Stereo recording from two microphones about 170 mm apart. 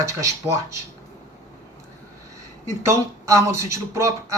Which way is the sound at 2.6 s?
15° right (ahead or behind).